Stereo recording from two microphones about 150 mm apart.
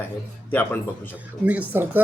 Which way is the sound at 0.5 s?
15° left (ahead or behind).